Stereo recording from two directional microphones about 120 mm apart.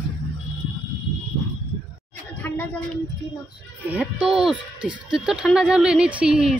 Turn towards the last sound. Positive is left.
turn(degrees=-5)  # may be behind; listen again after turning